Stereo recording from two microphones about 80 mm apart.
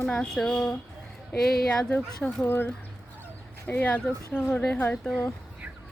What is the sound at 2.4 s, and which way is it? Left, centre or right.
Speech, left.